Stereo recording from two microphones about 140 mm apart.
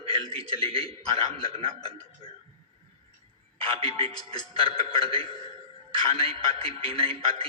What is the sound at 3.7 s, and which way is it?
A man's voice, 45° right (ahead or behind).